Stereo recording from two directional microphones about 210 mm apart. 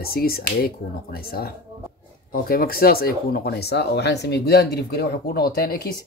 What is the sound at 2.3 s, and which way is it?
Speech, 45° left (ahead or behind).